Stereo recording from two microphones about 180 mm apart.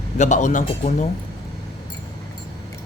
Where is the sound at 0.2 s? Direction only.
45° left (ahead or behind).